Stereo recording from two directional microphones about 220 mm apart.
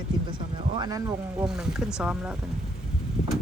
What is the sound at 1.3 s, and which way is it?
Speech, 5° right (ahead or behind).